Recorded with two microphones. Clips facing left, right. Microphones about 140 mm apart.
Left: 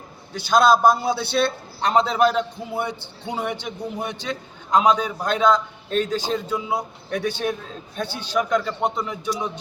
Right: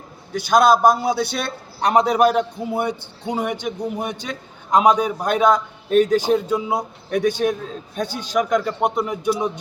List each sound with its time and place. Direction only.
0.4 s a man's voice: 10° right (ahead or behind)